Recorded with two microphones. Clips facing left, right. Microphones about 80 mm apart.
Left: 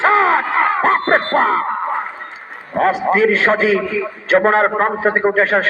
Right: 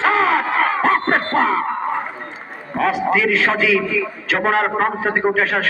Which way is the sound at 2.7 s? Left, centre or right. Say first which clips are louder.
Left 3 dB; left.